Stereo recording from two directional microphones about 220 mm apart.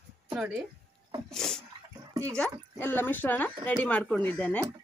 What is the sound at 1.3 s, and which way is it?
Speech, centre (ahead or behind).